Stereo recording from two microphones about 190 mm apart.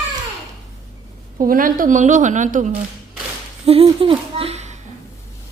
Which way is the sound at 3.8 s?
30° right (ahead or behind).